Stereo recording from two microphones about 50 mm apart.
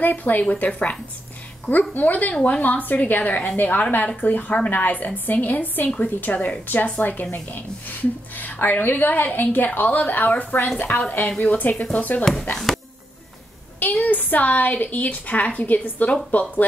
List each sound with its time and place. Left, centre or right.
0.0 s a woman's voice: left
12.7 s a sound: centre
14.0 s a woman's voice: left